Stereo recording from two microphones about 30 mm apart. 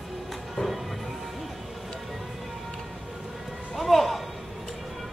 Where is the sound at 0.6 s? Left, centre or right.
Left.